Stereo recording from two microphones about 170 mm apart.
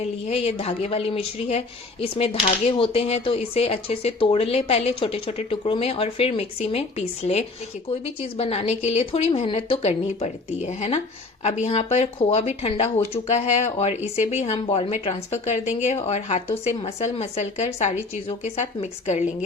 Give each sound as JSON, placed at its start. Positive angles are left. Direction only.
{"t": 0.0, "sound": "speech", "side_deg": 35}